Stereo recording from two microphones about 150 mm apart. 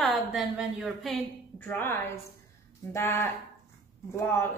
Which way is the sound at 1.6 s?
15° left (ahead or behind).